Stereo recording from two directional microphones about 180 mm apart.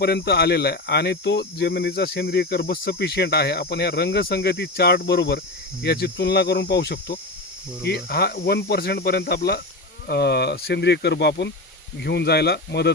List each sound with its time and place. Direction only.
0.0 s speech: 65° left (ahead or behind)